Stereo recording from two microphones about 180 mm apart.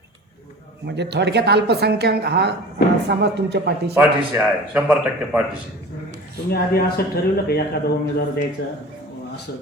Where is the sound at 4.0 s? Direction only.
10° right (ahead or behind).